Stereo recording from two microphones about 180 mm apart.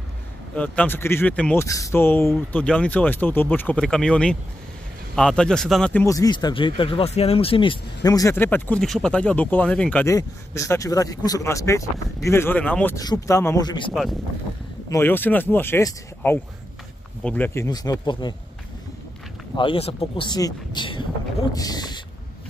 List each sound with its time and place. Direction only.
0.6 s speech: 10° left (ahead or behind)
6.0 s speech: 20° left (ahead or behind)
14.9 s speech: 10° left (ahead or behind)
17.6 s speech: 20° left (ahead or behind)
19.5 s speech: 30° left (ahead or behind)